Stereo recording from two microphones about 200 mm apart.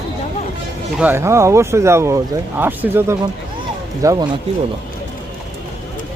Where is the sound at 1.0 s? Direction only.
10° right (ahead or behind).